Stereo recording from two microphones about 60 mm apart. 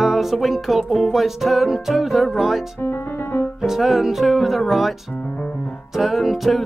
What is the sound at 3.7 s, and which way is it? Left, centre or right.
Music, centre.